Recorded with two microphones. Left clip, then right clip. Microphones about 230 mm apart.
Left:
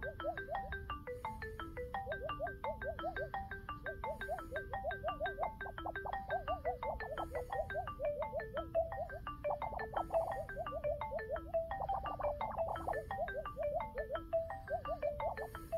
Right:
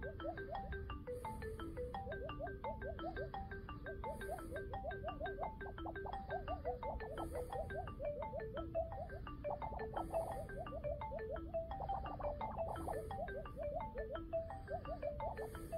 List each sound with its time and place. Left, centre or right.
0.0 s music: left
1.8 s music: left